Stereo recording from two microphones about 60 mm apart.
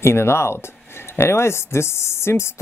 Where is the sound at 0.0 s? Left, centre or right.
Left.